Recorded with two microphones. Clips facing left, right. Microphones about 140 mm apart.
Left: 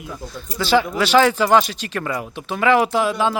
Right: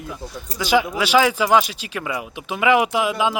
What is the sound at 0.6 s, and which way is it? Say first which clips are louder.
Speech: left 1 dB; 10° right (ahead or behind).